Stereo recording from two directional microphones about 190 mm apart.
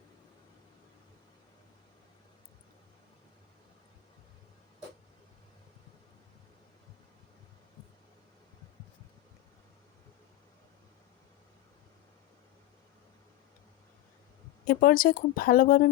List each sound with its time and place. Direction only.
14.7 s speech: 50° left (ahead or behind)